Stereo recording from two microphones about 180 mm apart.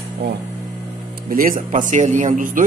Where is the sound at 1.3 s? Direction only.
50° right (ahead or behind).